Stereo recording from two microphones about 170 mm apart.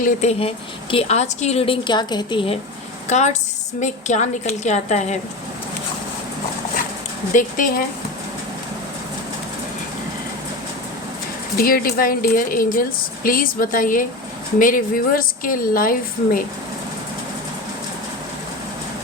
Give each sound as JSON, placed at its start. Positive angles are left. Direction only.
{"t": 0.0, "sound": "a woman's voice", "side_deg": 40}
{"t": 3.1, "sound": "a woman's voice", "side_deg": 45}
{"t": 7.3, "sound": "a woman's voice", "side_deg": 50}
{"t": 11.5, "sound": "a woman's voice", "side_deg": 60}